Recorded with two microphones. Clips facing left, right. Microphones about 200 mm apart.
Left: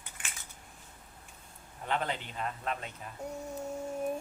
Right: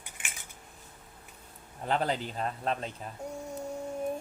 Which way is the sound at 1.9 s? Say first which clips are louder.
Right 4 dB; 35° right (ahead or behind).